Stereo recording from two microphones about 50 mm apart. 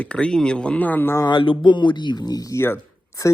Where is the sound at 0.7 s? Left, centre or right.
Left.